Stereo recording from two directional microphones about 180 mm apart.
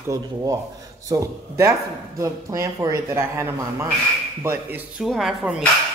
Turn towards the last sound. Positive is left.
turn(degrees=0)  # may be behind; listen again after turning